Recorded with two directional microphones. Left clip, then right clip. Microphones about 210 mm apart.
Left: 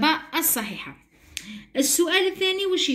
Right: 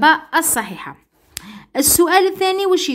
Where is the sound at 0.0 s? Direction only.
40° right (ahead or behind).